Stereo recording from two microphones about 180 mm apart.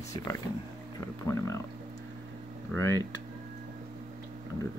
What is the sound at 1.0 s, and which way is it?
Speech, 15° left (ahead or behind).